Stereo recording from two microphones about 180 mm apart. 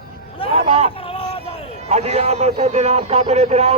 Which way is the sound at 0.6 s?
35° right (ahead or behind).